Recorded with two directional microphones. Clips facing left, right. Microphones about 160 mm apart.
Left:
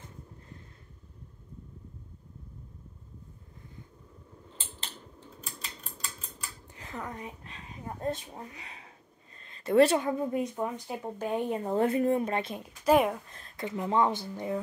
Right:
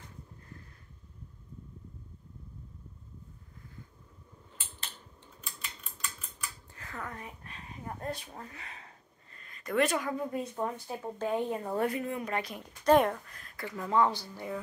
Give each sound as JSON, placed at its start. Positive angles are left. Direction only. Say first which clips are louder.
{"t": 5.4, "sound": "scissors", "louder": "left 1 dB", "side_deg": 35}
{"t": 6.7, "sound": "a sound", "louder": "left 4 dB", "side_deg": 20}
{"t": 8.0, "sound": "speech", "louder": "left 7 dB", "side_deg": 20}
{"t": 9.4, "sound": "speech", "louder": "left 7 dB", "side_deg": 30}
{"t": 12.6, "sound": "a woman's voice", "louder": "even", "side_deg": 5}
{"t": 13.3, "sound": "speech", "louder": "left 5 dB", "side_deg": 25}